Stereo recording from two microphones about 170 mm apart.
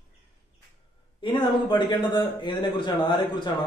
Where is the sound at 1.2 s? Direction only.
30° left (ahead or behind).